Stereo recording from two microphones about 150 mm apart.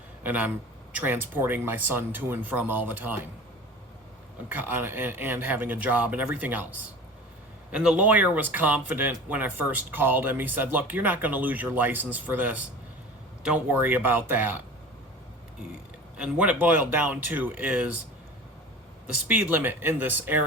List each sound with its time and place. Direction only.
0.2 s a man's voice: 10° right (ahead or behind)
4.4 s speech: 10° right (ahead or behind)
16.1 s speech: 5° right (ahead or behind)
19.0 s speech: 15° right (ahead or behind)